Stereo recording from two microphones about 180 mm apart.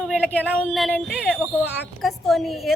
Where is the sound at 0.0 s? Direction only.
5° left (ahead or behind).